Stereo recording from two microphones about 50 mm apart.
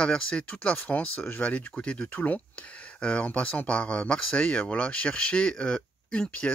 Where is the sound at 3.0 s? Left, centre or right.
Left.